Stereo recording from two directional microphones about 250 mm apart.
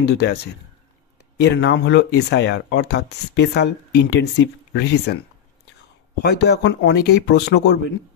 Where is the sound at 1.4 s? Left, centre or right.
Left.